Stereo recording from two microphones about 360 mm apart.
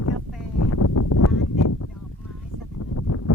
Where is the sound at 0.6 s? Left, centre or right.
Left.